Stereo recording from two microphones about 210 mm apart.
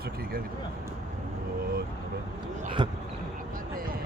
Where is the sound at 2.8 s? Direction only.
20° right (ahead or behind).